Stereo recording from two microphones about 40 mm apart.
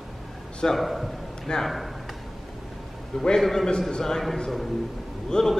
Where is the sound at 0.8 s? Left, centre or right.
Centre.